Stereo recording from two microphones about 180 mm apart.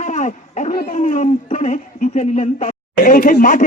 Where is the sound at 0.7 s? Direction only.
55° left (ahead or behind).